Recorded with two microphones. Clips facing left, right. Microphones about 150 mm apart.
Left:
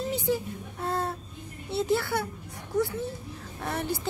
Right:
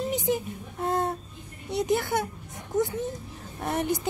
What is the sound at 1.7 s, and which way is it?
A child's voice, 15° right (ahead or behind).